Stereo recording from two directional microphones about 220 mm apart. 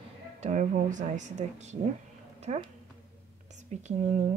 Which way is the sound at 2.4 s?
30° right (ahead or behind).